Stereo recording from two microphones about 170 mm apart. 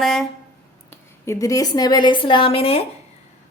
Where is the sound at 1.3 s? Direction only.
20° left (ahead or behind).